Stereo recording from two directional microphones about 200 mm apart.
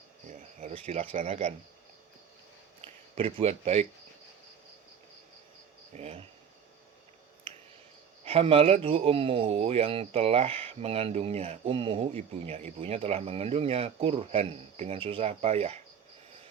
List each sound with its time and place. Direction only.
0.3 s a sound: 35° right (ahead or behind)
0.9 s speech: 30° right (ahead or behind)
3.2 s speech: 30° right (ahead or behind)
5.9 s speech: 30° right (ahead or behind)
8.2 s a man's voice: 30° right (ahead or behind)